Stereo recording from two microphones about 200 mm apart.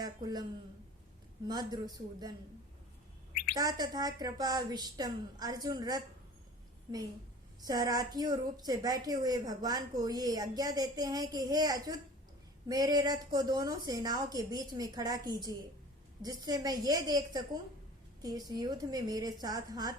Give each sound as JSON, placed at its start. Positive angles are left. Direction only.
{"t": 0.0, "sound": "speech", "side_deg": -20}
{"t": 1.5, "sound": "a woman's voice", "side_deg": -20}
{"t": 3.5, "sound": "a woman's voice", "side_deg": -20}
{"t": 7.6, "sound": "a woman's voice", "side_deg": -20}